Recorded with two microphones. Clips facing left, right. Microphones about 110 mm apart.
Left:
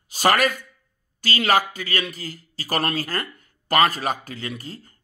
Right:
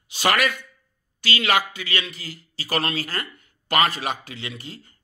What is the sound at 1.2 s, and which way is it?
A man's voice, 40° left (ahead or behind).